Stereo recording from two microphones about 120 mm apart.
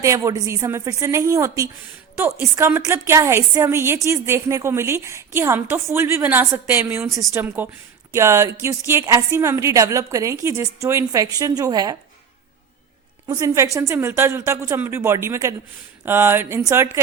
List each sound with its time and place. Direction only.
0.0 s a woman's voice: 25° right (ahead or behind)
13.2 s a woman's voice: 30° right (ahead or behind)